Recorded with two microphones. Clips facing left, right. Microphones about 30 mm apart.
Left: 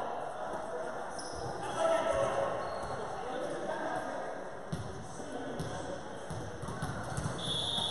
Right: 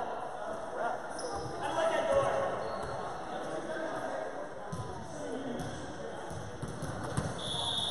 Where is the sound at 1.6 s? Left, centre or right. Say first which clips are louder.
Even; centre.